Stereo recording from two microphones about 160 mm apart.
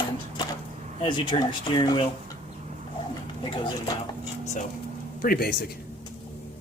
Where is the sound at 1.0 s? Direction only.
30° left (ahead or behind).